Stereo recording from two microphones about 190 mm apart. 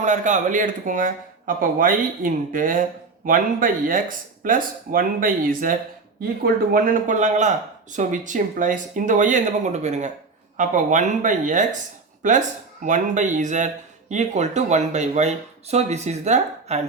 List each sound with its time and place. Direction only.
0.0 s speech: 40° right (ahead or behind)